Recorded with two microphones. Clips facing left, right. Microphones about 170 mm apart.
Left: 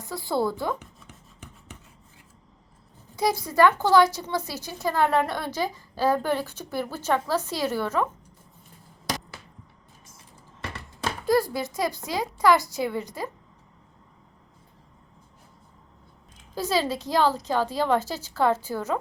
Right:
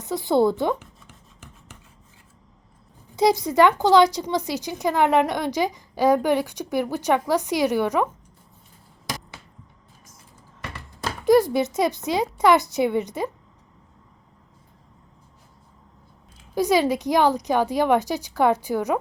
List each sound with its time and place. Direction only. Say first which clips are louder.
0.0 s speech: right 7 dB; 20° right (ahead or behind)
0.8 s rub: even; centre (ahead or behind)
3.2 s speech: right 4 dB; 20° right (ahead or behind)
11.3 s speech: right 7 dB; 20° right (ahead or behind)
16.6 s speech: right 6 dB; 15° right (ahead or behind)